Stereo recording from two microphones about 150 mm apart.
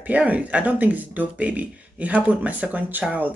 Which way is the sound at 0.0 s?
10° right (ahead or behind).